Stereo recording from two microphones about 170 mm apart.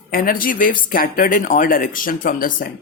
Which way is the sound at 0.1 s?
55° left (ahead or behind).